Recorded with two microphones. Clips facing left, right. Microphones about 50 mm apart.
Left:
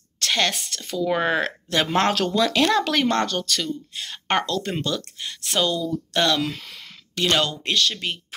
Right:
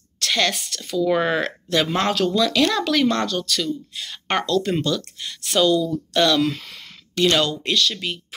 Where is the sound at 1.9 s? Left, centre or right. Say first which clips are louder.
Even; left.